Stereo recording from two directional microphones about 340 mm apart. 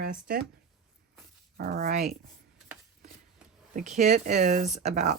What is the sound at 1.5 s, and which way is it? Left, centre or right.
Speech, right.